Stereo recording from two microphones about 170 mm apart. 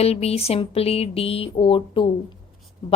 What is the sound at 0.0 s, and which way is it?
A woman's voice, 35° left (ahead or behind).